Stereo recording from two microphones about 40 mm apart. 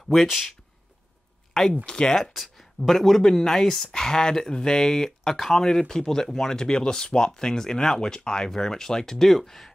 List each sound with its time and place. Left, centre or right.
0.3 s speech: centre
1.5 s speech: centre
1.9 s speech: left
2.3 s speech: centre